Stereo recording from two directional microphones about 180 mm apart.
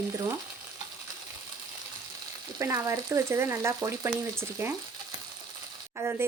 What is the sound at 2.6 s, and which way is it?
Speech, 15° right (ahead or behind).